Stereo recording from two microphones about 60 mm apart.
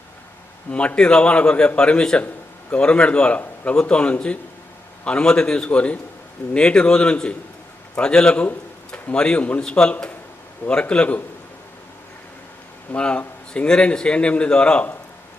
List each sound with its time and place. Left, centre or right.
0.7 s a man's voice: centre
2.2 s a sound: left
2.8 s a man's voice: centre
13.0 s a man's voice: centre